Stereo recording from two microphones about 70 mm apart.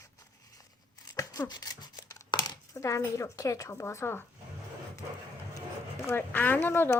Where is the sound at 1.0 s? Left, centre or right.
Left.